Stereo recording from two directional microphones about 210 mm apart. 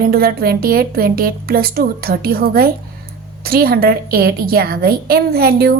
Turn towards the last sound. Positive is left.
turn(degrees=-45)  # may be behind; listen again after turning